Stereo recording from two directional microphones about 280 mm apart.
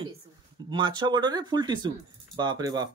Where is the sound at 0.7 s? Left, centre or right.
Centre.